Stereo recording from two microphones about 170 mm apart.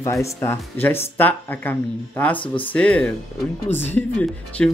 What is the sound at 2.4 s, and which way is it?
Speech, 30° left (ahead or behind).